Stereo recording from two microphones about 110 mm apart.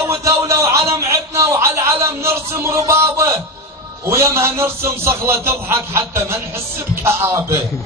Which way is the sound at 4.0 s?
25° right (ahead or behind).